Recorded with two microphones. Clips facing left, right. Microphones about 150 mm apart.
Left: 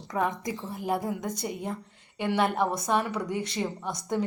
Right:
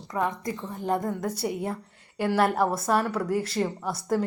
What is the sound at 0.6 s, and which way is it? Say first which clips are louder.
Speech: right 2 dB; 5° left (ahead or behind).